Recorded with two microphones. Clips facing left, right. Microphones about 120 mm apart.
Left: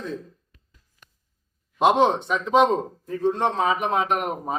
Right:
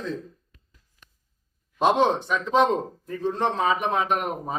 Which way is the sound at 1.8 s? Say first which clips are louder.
Left 2 dB; 15° left (ahead or behind).